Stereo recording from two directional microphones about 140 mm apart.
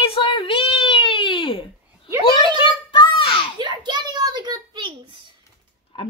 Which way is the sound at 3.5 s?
35° right (ahead or behind).